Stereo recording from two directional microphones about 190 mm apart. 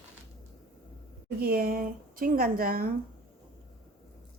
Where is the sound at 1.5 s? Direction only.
50° right (ahead or behind).